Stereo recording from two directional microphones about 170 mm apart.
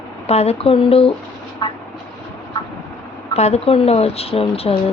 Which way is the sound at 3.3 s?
40° left (ahead or behind).